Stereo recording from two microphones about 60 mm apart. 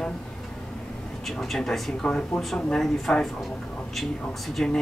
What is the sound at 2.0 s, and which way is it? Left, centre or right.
Speech, centre.